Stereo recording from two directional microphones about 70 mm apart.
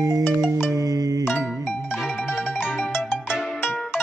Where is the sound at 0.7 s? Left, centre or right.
Right.